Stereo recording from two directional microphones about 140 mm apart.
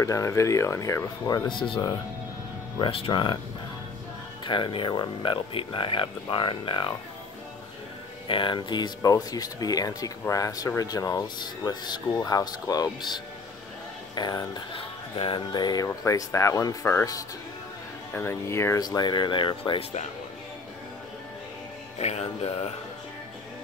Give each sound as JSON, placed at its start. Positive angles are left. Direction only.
{"t": 0.0, "sound": "speech", "side_deg": 20}
{"t": 4.5, "sound": "speech", "side_deg": 35}
{"t": 8.3, "sound": "speech", "side_deg": 35}
{"t": 21.9, "sound": "speech", "side_deg": 50}